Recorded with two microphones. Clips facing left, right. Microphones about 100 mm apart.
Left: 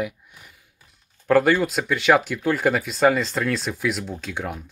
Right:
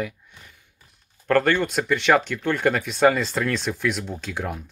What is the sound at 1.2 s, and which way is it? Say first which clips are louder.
Speech: left 2 dB; 5° left (ahead or behind).